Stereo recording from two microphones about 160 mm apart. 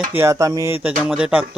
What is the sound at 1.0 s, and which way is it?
Speech, 5° right (ahead or behind).